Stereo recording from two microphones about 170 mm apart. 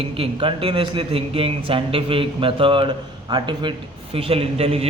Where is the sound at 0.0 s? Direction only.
30° right (ahead or behind).